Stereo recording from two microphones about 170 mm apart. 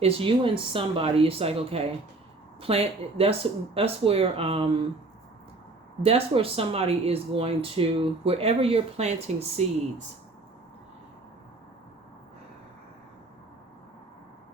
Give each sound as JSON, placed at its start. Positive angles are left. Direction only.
{"t": 0.0, "sound": "speech", "side_deg": -30}
{"t": 6.0, "sound": "speech", "side_deg": -35}